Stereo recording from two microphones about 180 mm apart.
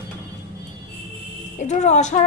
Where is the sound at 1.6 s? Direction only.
40° left (ahead or behind).